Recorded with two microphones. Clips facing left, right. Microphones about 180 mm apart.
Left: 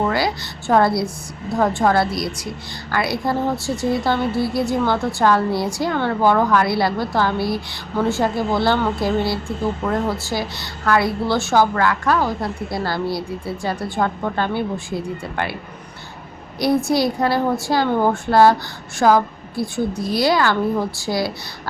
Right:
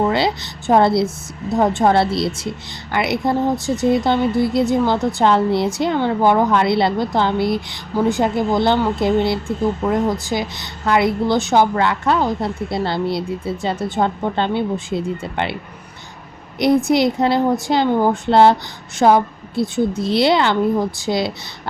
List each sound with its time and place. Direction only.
0.0 s a woman's voice: 25° right (ahead or behind)
16.6 s a woman's voice: 20° right (ahead or behind)
18.3 s a woman's voice: 25° right (ahead or behind)